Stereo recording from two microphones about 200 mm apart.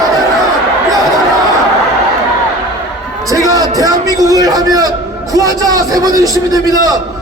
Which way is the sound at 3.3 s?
15° right (ahead or behind).